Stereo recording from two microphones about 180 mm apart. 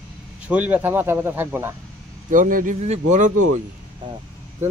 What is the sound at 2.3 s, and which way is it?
Speech, 50° right (ahead or behind).